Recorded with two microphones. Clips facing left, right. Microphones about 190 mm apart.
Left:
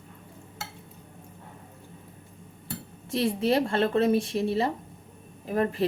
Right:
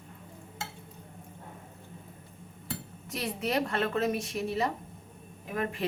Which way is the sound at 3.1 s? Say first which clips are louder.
Left 7 dB; 30° left (ahead or behind).